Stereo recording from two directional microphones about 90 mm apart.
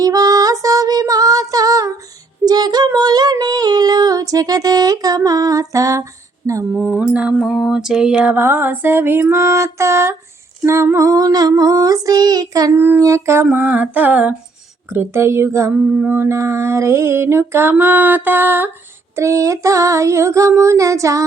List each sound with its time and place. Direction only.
0.0 s female singing: 40° right (ahead or behind)
6.7 s mantra: 15° right (ahead or behind)
10.9 s child singing: 40° right (ahead or behind)
12.7 s mantra: 25° right (ahead or behind)
13.0 s a sound: 30° right (ahead or behind)
13.5 s mantra: 20° right (ahead or behind)
14.8 s a sound: 30° right (ahead or behind)
15.7 s mantra: 15° right (ahead or behind)
19.1 s a sound: 35° right (ahead or behind)